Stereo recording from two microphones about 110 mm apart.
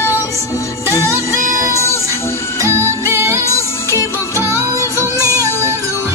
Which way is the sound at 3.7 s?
25° left (ahead or behind).